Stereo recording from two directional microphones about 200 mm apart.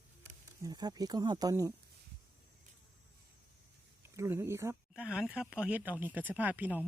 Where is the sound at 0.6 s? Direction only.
20° right (ahead or behind).